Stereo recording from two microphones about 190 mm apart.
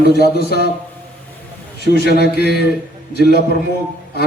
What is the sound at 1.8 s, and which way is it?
Speech, 60° left (ahead or behind).